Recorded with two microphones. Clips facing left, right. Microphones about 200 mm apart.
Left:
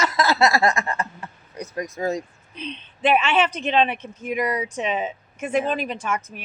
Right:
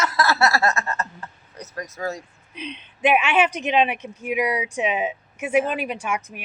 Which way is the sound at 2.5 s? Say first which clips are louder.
Left 1 dB; 10° right (ahead or behind).